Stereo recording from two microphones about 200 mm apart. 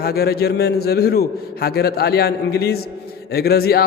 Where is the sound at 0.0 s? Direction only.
50° left (ahead or behind).